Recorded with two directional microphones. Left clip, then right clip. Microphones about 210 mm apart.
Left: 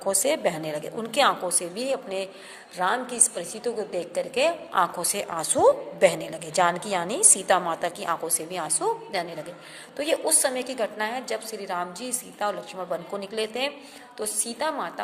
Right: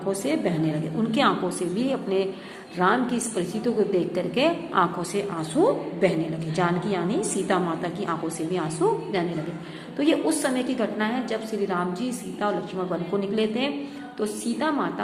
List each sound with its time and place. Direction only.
0.1 s a woman's voice: 45° left (ahead or behind)